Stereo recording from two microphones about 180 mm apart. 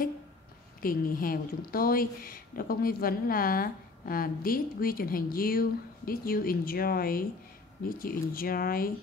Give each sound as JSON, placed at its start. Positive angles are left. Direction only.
{"t": 0.8, "sound": "a woman's voice", "side_deg": 50}